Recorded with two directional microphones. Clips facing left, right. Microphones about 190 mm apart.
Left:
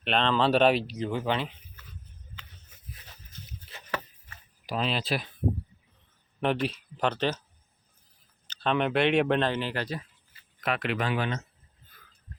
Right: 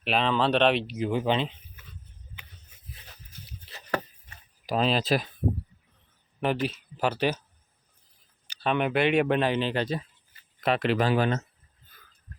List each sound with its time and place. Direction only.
0.0 s speech: 5° right (ahead or behind)
0.9 s speech: 10° right (ahead or behind)
4.6 s speech: 40° right (ahead or behind)
6.4 s speech: centre (ahead or behind)
8.4 s speech: 5° right (ahead or behind)
9.6 s speech: 20° right (ahead or behind); by 11.4 s 40° right (ahead or behind)